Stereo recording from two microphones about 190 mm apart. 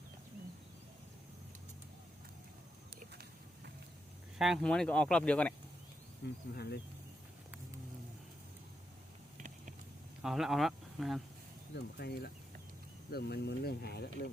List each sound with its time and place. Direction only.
4.4 s speech: centre (ahead or behind)
6.5 s speech: 60° left (ahead or behind)
10.2 s speech: centre (ahead or behind)
11.7 s speech: 60° left (ahead or behind)